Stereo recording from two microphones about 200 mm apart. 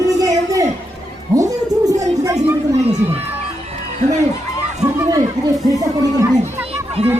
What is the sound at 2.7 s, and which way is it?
Speech, 35° right (ahead or behind).